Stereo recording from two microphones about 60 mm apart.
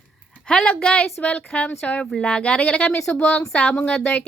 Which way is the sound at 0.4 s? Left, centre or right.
Centre.